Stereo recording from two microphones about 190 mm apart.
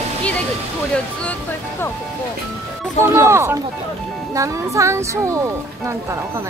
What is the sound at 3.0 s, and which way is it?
Speech, 15° right (ahead or behind).